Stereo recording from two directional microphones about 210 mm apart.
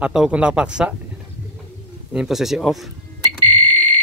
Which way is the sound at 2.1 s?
Centre (ahead or behind).